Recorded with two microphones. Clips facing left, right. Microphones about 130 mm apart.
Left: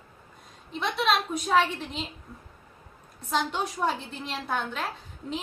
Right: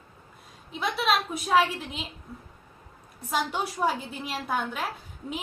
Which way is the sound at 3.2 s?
10° right (ahead or behind).